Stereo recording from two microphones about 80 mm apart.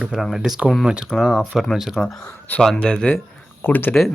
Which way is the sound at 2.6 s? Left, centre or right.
Centre.